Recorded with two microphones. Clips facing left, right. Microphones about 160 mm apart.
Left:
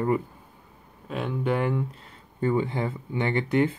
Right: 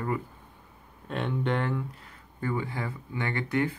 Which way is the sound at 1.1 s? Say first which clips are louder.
Left 2 dB; centre (ahead or behind).